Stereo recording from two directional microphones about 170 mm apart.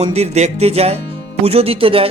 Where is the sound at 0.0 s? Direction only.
40° right (ahead or behind).